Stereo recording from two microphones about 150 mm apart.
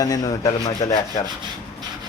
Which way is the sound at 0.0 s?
25° left (ahead or behind).